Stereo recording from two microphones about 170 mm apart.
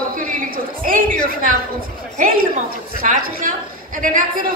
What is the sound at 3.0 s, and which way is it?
A woman's voice, 50° right (ahead or behind).